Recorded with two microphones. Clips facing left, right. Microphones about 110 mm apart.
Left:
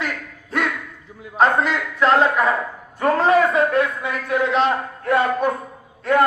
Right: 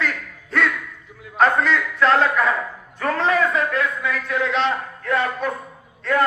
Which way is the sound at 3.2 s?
30° left (ahead or behind).